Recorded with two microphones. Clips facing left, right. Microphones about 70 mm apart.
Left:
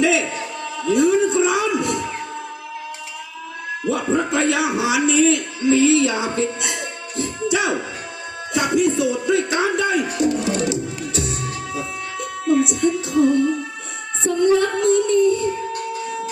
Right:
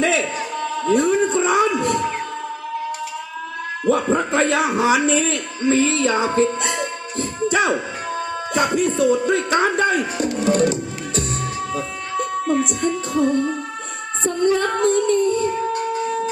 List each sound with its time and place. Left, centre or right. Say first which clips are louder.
0.0 s a sound: left 1 dB; right
0.8 s music: left 1 dB; right
3.8 s a man's voice: right 2 dB; right
11.7 s music: right 3 dB; right